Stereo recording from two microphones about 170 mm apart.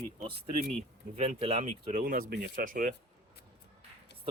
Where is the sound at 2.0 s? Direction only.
55° right (ahead or behind).